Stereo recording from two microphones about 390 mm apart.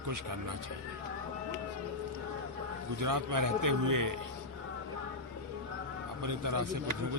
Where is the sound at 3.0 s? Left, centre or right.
Right.